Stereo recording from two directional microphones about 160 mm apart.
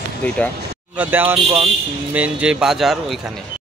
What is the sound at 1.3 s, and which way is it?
Speech, 40° right (ahead or behind).